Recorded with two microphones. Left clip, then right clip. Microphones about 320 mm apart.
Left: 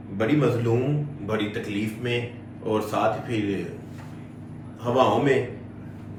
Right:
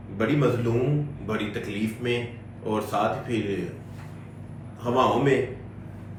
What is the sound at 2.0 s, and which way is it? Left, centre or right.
Mantra, centre.